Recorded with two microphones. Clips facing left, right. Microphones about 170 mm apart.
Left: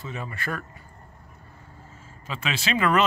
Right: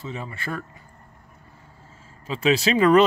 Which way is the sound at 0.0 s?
25° right (ahead or behind).